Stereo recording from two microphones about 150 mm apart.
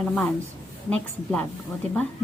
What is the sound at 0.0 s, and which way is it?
Speech, 5° left (ahead or behind).